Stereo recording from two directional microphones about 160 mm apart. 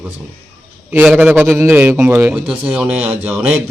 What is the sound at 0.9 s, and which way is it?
A man's voice, 10° right (ahead or behind).